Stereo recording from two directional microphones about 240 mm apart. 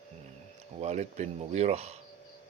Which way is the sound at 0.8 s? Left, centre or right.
Right.